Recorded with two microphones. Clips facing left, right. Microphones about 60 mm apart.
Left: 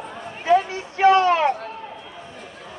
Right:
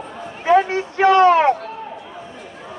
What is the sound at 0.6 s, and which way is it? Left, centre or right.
Speech, right.